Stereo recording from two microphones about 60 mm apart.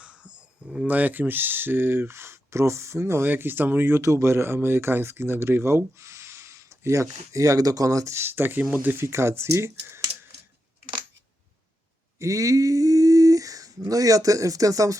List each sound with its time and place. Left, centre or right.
0.0 s a sound: centre
0.9 s speech: right
4.0 s speech: right
8.1 s speech: right
12.2 s speech: right